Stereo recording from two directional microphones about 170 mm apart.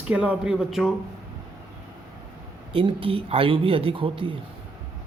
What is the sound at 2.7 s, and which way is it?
Speech, 30° right (ahead or behind).